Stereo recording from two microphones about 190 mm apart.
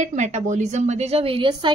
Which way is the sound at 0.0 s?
40° right (ahead or behind).